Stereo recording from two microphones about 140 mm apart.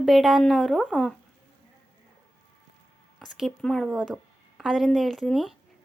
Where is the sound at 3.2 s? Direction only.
Centre (ahead or behind).